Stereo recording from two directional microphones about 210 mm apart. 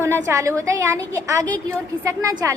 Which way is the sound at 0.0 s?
15° right (ahead or behind).